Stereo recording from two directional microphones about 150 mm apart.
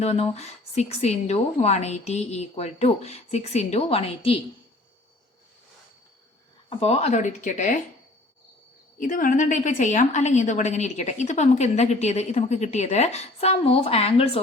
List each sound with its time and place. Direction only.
0.0 s a woman's voice: 45° left (ahead or behind)
6.7 s a woman's voice: 45° left (ahead or behind)
9.0 s a woman's voice: 65° left (ahead or behind); by 14.4 s 40° left (ahead or behind)